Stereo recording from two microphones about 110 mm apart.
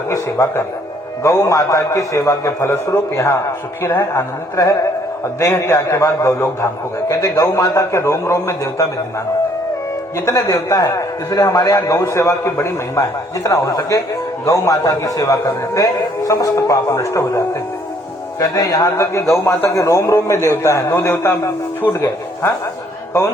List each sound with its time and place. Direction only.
0.1 s a man's voice: 30° left (ahead or behind)
10.2 s a man's voice: 30° left (ahead or behind)